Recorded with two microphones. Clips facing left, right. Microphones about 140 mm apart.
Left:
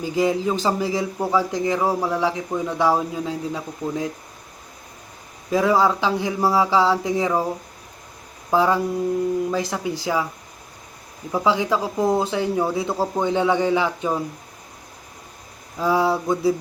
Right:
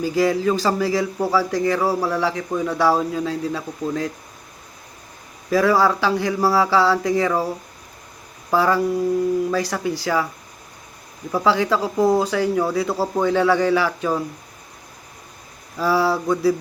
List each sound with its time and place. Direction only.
0.0 s a man's voice: 20° left (ahead or behind)
5.5 s a man's voice: 20° left (ahead or behind)
11.3 s speech: 15° left (ahead or behind)
15.8 s a man's voice: 20° left (ahead or behind)